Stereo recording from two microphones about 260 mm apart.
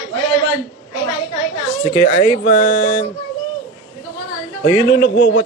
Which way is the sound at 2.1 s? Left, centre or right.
Left.